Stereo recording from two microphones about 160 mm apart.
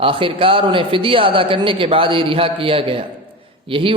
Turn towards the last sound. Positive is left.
turn(degrees=-35)  # may be behind; listen again after turning